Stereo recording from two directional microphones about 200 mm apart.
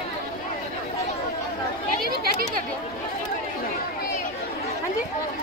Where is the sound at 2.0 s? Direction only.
50° right (ahead or behind).